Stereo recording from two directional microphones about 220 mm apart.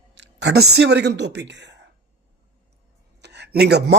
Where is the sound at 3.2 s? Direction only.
50° right (ahead or behind).